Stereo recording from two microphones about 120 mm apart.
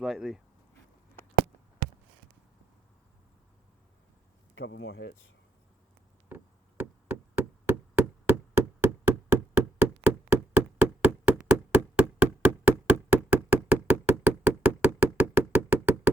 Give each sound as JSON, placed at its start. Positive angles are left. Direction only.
{"t": 0.0, "sound": "speech", "side_deg": -5}
{"t": 6.2, "sound": "knock", "side_deg": -15}